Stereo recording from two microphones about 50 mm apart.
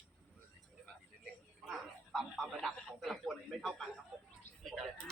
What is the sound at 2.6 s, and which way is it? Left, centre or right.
A man's voice, centre.